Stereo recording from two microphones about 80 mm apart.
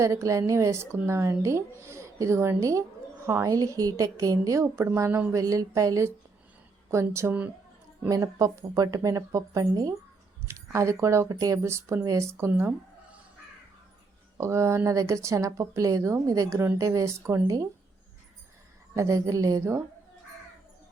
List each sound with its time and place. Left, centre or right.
0.0 s speech: right
3.2 s speech: right
3.5 s a woman's voice: right
5.3 s a woman's voice: right
10.5 s speech: right
14.3 s speech: right
18.9 s a woman's voice: right